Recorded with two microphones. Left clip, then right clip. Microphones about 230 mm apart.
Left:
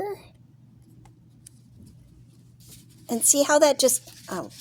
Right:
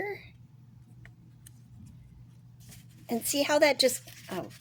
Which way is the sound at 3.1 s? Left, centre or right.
Left.